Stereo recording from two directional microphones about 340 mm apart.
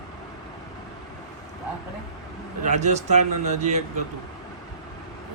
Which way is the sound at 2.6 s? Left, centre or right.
Right.